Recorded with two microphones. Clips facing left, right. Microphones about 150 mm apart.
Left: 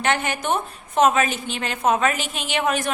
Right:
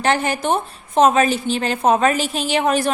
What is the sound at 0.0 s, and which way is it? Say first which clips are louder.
A woman's voice: right 4 dB; 35° right (ahead or behind).